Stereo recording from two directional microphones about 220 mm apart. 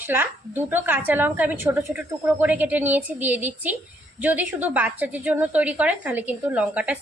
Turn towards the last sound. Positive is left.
turn(degrees=-5)  # may be behind; listen again after turning